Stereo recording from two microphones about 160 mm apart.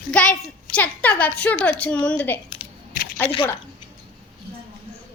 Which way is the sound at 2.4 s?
30° left (ahead or behind).